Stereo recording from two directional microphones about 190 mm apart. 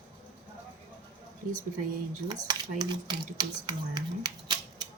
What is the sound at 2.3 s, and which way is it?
Speech, 20° right (ahead or behind).